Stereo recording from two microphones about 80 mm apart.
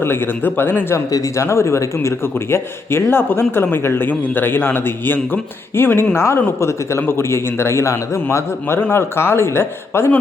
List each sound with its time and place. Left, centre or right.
0.0 s a man's voice: left
1.1 s a man's voice: left